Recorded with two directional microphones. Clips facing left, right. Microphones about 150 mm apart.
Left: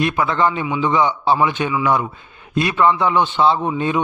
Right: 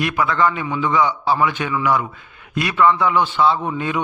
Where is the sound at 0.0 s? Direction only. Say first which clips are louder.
Left 1 dB; 25° left (ahead or behind).